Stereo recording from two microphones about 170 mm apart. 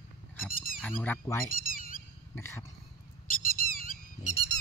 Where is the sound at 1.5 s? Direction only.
55° left (ahead or behind).